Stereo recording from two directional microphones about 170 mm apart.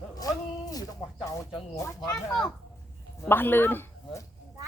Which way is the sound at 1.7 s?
15° left (ahead or behind).